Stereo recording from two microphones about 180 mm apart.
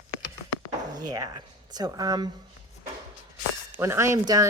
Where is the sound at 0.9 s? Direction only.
20° right (ahead or behind).